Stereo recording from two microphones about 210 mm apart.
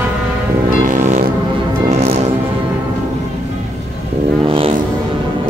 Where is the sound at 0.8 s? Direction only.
35° right (ahead or behind).